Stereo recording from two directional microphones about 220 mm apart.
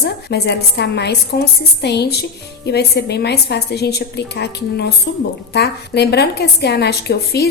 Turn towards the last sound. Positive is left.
turn(degrees=45)  # may be behind; listen again after turning